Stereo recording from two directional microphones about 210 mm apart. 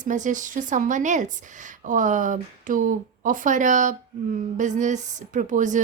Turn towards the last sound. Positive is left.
turn(degrees=-35)  # may be behind; listen again after turning